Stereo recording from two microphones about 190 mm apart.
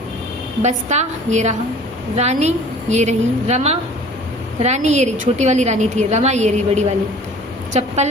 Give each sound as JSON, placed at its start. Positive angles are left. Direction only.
{"t": 0.6, "sound": "a woman's voice", "side_deg": -35}